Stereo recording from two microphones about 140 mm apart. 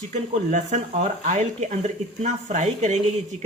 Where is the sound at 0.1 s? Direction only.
60° right (ahead or behind).